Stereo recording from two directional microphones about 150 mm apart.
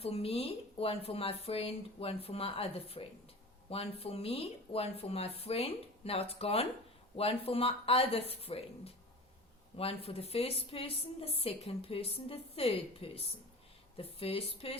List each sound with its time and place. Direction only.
0.0 s a woman's voice: 40° left (ahead or behind)